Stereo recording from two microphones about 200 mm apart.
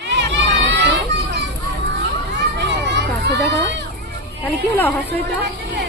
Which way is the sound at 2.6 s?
60° right (ahead or behind).